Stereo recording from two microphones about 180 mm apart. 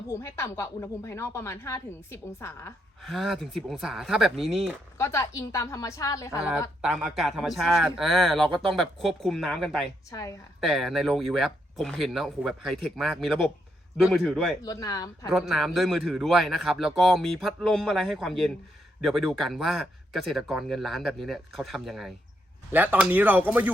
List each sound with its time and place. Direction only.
0.1 s speech: 15° left (ahead or behind)
3.0 s a man's voice: centre (ahead or behind)
4.9 s speech: 15° left (ahead or behind)
6.8 s a man's voice: centre (ahead or behind)
10.1 s speech: 20° left (ahead or behind)
10.6 s a man's voice: centre (ahead or behind)
14.6 s speech: 20° left (ahead or behind)
15.3 s a man's voice: centre (ahead or behind)